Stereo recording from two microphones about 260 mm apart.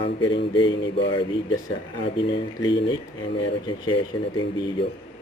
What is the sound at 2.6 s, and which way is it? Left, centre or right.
Speech, centre.